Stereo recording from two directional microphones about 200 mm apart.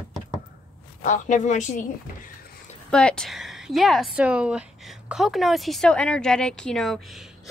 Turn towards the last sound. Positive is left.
turn(degrees=0)  # may be behind; listen again after turning